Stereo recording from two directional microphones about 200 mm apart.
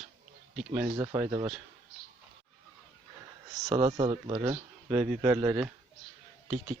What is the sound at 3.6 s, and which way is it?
Speech, 25° right (ahead or behind).